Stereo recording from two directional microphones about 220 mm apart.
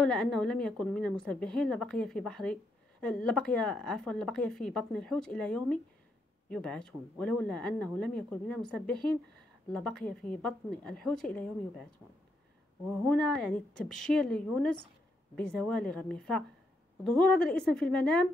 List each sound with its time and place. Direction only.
0.0 s a woman's voice: 5° left (ahead or behind)
13.0 s a woman's voice: 5° left (ahead or behind)